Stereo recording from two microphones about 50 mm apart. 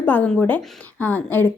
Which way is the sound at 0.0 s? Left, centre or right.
Left.